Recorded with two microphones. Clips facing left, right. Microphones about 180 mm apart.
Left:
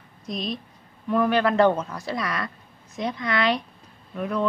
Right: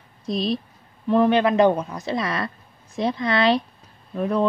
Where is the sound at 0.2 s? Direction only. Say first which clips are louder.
Right 6 dB; 30° right (ahead or behind).